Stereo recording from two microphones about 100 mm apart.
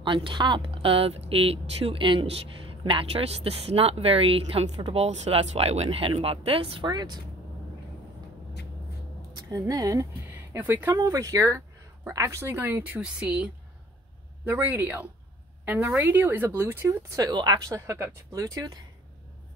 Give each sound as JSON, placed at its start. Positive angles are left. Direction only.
{"t": 0.0, "sound": "speech", "side_deg": -55}
{"t": 6.9, "sound": "speech", "side_deg": -45}
{"t": 9.3, "sound": "speech", "side_deg": -40}
{"t": 10.3, "sound": "speech", "side_deg": -20}
{"t": 11.0, "sound": "speech", "side_deg": -35}
{"t": 17.3, "sound": "speech", "side_deg": -45}
{"t": 17.6, "sound": "speech", "side_deg": -30}